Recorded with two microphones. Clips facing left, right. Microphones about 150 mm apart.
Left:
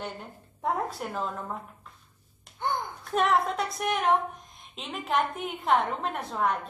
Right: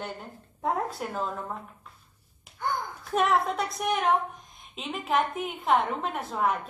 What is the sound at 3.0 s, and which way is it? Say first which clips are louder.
A woman's voice: even; centre (ahead or behind).